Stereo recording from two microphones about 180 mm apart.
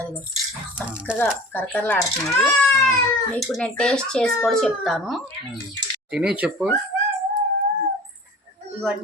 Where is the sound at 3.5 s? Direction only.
5° left (ahead or behind).